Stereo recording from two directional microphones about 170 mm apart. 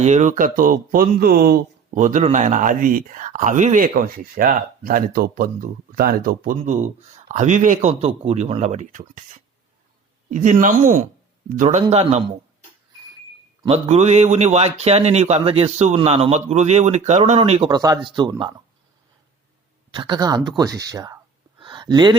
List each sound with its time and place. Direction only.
0.0 s speech: 45° right (ahead or behind); by 1.5 s 60° right (ahead or behind)
2.0 s speech: 50° right (ahead or behind)
7.3 s speech: 45° right (ahead or behind)
13.7 s a man's voice: 40° right (ahead or behind)
17.7 s speech: 20° right (ahead or behind)
19.9 s speech: 25° right (ahead or behind)
21.6 s a sound: 25° right (ahead or behind)